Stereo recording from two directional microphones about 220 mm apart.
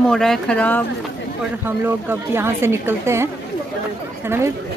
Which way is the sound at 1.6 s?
10° right (ahead or behind).